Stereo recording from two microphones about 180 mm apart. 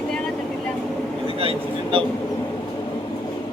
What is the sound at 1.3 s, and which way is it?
Vehicle, 30° right (ahead or behind).